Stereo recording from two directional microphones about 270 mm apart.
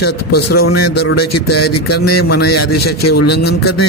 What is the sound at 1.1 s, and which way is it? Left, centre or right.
A man's voice, left.